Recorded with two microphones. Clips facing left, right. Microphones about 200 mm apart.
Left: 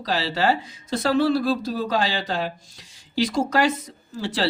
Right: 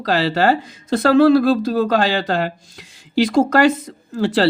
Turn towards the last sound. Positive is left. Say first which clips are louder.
# right 9 dB
turn(degrees=-55)  # may be behind; listen again after turning